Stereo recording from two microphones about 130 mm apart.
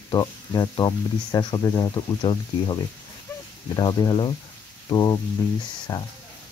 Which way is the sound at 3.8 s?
35° left (ahead or behind).